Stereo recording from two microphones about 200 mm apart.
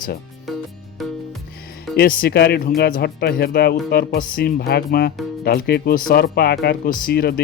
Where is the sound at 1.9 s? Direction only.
45° left (ahead or behind).